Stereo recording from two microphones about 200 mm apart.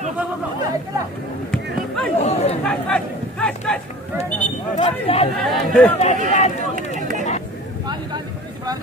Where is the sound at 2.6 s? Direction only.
5° left (ahead or behind).